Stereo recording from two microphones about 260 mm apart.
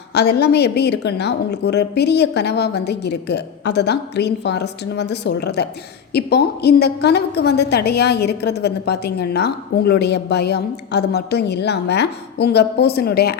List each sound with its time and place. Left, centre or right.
0.1 s a woman's voice: left